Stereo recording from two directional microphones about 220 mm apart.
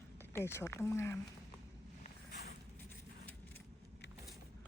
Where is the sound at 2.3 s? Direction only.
45° left (ahead or behind).